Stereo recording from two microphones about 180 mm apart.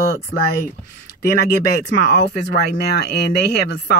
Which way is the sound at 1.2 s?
60° left (ahead or behind).